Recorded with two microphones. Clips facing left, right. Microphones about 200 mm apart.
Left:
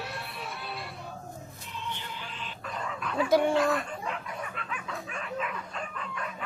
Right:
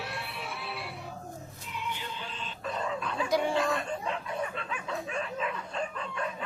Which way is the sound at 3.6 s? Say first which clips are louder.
Left 2 dB; 25° right (ahead or behind).